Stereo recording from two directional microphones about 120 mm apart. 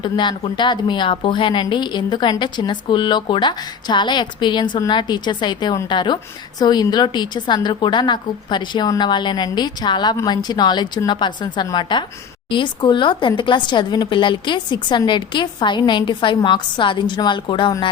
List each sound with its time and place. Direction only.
0.0 s speech: 40° left (ahead or behind)